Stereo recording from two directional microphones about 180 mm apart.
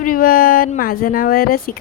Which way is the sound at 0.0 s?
50° left (ahead or behind).